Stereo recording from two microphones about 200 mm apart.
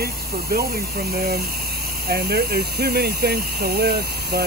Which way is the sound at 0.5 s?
50° right (ahead or behind).